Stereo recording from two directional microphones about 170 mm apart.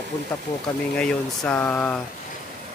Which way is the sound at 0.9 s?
5° left (ahead or behind).